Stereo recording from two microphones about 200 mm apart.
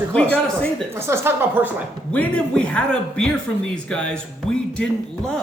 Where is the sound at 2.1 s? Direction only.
5° left (ahead or behind).